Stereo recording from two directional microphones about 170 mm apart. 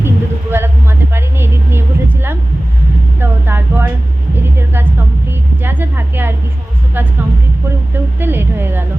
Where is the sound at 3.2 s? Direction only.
15° right (ahead or behind).